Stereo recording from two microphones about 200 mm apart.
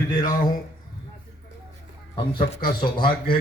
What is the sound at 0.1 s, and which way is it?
Speech, 20° left (ahead or behind).